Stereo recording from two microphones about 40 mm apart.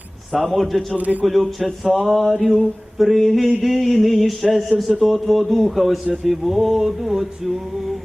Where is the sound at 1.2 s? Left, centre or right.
Centre.